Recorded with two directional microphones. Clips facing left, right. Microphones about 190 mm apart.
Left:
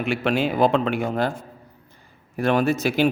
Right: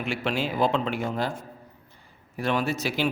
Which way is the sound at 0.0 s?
60° left (ahead or behind).